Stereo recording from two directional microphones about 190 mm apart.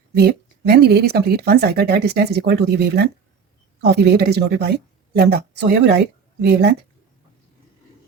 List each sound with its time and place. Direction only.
0.1 s speech: 60° right (ahead or behind)